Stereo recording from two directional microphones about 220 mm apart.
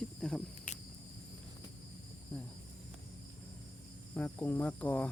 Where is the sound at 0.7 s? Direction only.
35° left (ahead or behind).